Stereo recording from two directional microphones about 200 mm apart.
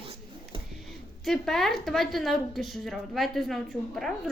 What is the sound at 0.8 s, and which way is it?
A woman's voice, centre (ahead or behind).